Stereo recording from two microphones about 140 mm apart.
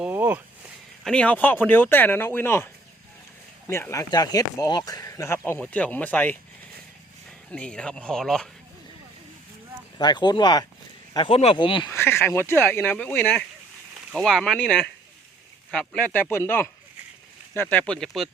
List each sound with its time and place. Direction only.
0.0 s a sound: 10° right (ahead or behind)
1.0 s speech: 5° left (ahead or behind)
3.7 s speech: 20° left (ahead or behind)
7.5 s speech: 5° left (ahead or behind)
10.0 s speech: 30° left (ahead or behind)
11.9 s speech: 20° left (ahead or behind)
14.1 s speech: centre (ahead or behind)